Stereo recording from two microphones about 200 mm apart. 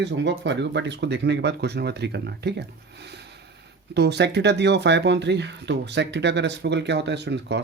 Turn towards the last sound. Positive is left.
turn(degrees=-60)  # may be behind; listen again after turning